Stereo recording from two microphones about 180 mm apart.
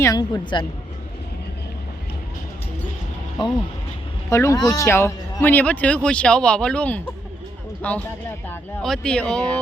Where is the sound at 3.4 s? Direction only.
25° left (ahead or behind).